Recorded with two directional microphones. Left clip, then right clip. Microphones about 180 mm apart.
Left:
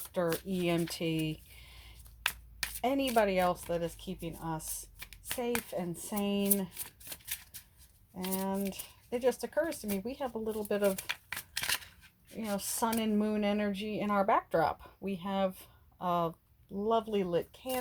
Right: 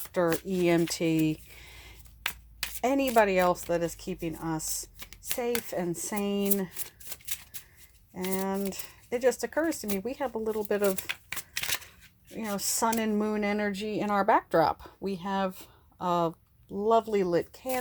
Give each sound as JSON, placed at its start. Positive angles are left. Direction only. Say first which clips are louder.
{"t": 0.3, "sound": "speech", "louder": "right 7 dB", "side_deg": -30}
{"t": 12.4, "sound": "speech", "louder": "right 4 dB", "side_deg": -30}